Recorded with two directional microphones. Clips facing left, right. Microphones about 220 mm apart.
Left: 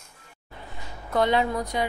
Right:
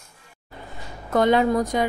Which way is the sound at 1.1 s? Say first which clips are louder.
Right 5 dB; 45° right (ahead or behind).